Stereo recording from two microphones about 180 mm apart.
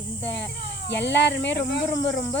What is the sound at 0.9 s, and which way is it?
Speech, 75° left (ahead or behind).